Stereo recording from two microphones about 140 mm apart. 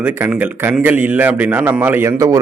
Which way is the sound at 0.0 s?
15° right (ahead or behind).